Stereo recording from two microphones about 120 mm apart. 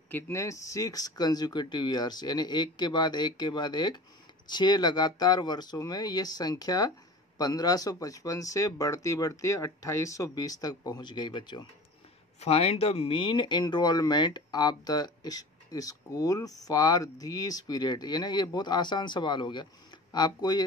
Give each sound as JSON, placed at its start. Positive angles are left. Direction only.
{"t": 0.1, "sound": "speech", "side_deg": 25}
{"t": 12.4, "sound": "speech", "side_deg": 60}